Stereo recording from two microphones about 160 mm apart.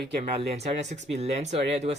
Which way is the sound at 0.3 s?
45° right (ahead or behind).